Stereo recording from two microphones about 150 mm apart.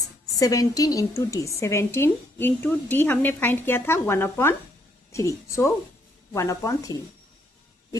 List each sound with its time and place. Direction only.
0.3 s a woman's voice: 20° left (ahead or behind)